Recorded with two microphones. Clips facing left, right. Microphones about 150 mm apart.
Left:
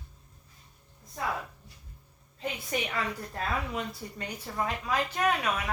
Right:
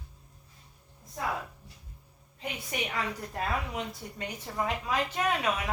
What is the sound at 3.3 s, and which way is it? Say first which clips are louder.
Speech: even; 15° right (ahead or behind).